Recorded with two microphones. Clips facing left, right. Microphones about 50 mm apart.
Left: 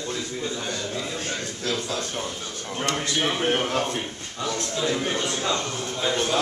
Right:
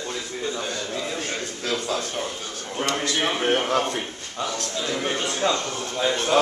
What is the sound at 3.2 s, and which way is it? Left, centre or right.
Speech, centre.